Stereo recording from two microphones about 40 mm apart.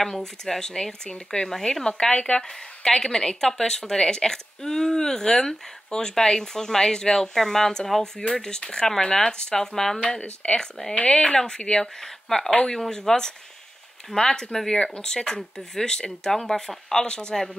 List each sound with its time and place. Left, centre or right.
0.5 s a woman's voice: centre
1.9 s a woman's voice: left
10.0 s a woman's voice: left
11.8 s a woman's voice: centre